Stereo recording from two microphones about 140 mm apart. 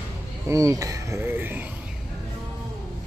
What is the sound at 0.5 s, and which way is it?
Speech, 25° right (ahead or behind).